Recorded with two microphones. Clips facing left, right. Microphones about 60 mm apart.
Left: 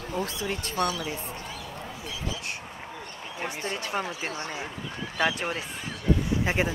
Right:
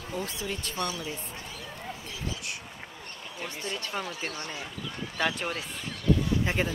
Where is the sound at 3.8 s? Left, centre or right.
Left.